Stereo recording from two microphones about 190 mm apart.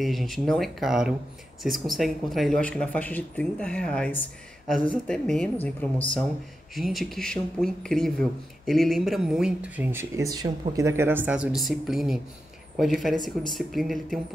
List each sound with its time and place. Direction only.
0.0 s speech: centre (ahead or behind)
13.1 s speech: 20° left (ahead or behind)
13.5 s speech: centre (ahead or behind)